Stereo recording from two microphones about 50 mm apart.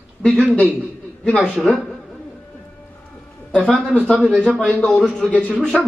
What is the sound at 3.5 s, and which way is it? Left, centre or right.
Speech, centre.